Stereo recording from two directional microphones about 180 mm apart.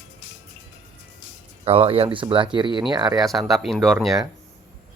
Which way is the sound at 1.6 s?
30° right (ahead or behind).